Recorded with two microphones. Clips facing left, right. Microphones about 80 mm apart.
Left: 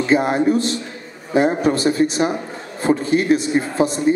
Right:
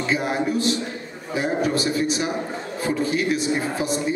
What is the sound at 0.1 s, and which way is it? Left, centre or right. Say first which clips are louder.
A man's voice: left 7 dB; left.